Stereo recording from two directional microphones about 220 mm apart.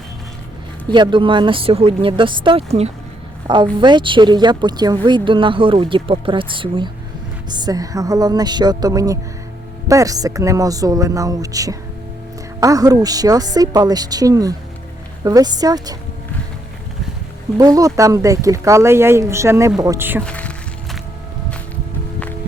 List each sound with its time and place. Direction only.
0.9 s speech: 20° right (ahead or behind)
17.6 s speech: 15° right (ahead or behind)
20.2 s music: 5° left (ahead or behind)